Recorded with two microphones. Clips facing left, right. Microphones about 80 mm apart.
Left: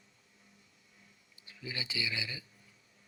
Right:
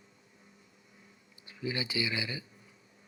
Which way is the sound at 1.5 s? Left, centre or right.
Right.